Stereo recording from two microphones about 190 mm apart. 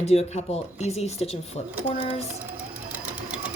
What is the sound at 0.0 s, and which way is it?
Speech, 35° left (ahead or behind).